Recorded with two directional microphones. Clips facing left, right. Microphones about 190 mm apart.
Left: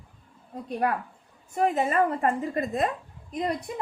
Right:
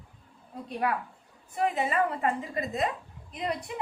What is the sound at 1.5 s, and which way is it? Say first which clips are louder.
A woman's voice: left 4 dB; 45° left (ahead or behind).